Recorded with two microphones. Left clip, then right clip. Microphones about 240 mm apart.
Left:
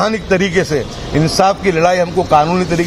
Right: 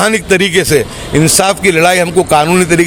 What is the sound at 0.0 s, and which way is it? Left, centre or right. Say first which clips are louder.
Speech: right 4 dB; right.